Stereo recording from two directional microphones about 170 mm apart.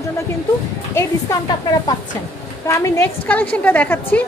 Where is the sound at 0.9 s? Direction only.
20° left (ahead or behind).